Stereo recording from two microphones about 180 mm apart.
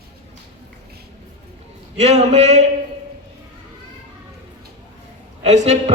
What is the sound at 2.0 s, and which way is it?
Speech, 35° right (ahead or behind).